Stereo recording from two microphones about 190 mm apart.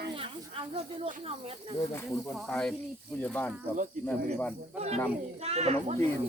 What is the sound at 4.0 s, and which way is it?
Speech, 45° right (ahead or behind).